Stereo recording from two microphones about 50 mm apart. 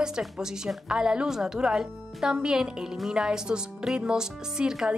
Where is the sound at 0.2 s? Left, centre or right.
Centre.